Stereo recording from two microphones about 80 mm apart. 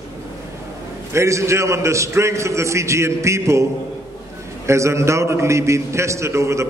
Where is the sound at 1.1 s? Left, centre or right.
Right.